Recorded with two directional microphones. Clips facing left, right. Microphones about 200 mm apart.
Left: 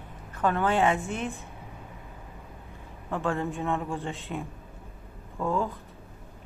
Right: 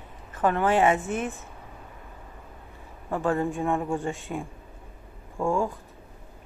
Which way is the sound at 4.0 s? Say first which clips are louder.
Right 3 dB; centre (ahead or behind).